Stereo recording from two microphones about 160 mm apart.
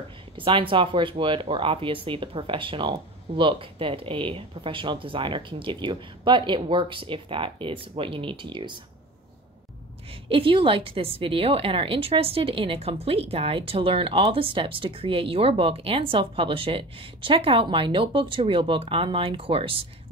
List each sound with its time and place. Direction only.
0.4 s a woman's voice: 35° right (ahead or behind)
10.2 s a woman's voice: 35° right (ahead or behind)